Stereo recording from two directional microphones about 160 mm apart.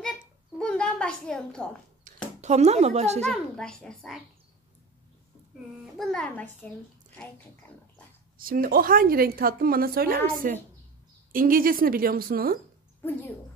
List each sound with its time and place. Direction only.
0.0 s a sound: 5° left (ahead or behind)
2.1 s a sound: 55° right (ahead or behind)
2.4 s speech: 45° right (ahead or behind)
3.3 s a child's voice: 5° left (ahead or behind)
5.9 s a child's voice: 5° left (ahead or behind)
8.4 s a woman's voice: 65° right (ahead or behind)